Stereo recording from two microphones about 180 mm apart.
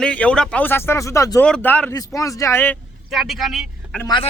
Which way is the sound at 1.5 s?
5° left (ahead or behind).